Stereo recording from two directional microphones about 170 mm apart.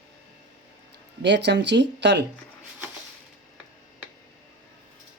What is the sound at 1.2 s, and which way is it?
Speech, 90° right.